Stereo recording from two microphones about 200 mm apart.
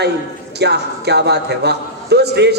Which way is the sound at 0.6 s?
55° right (ahead or behind).